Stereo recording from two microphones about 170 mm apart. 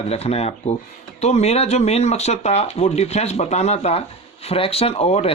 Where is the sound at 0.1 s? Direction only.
35° left (ahead or behind).